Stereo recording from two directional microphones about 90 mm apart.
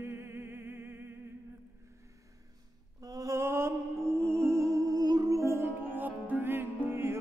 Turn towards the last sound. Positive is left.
turn(degrees=-25)  # may be behind; listen again after turning